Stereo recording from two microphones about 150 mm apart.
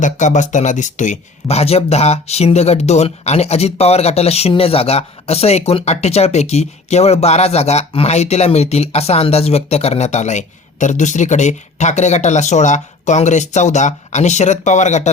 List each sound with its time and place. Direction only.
0.0 s speech: 55° left (ahead or behind)